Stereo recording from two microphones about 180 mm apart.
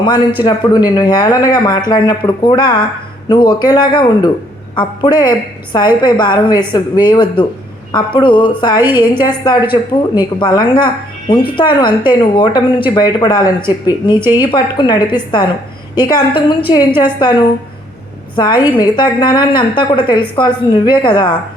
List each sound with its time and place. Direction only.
0.0 s a woman's voice: 25° left (ahead or behind)